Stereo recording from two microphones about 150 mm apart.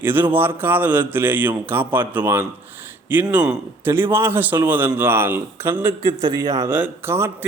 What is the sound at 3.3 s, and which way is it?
Speech, 10° right (ahead or behind).